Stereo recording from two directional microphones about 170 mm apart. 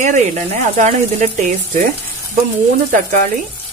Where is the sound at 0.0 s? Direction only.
45° right (ahead or behind).